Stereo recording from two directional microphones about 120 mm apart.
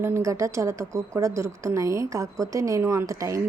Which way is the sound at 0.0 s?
25° right (ahead or behind).